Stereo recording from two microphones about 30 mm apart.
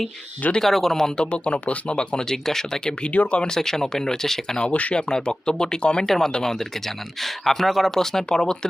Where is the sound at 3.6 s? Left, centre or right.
Centre.